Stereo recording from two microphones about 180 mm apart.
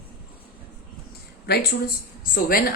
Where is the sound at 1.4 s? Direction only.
65° left (ahead or behind).